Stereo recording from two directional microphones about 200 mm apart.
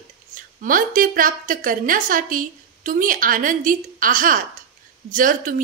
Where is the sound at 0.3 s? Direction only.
45° right (ahead or behind).